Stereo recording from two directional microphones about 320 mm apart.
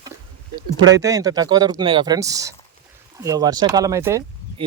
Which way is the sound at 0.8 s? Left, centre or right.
Right.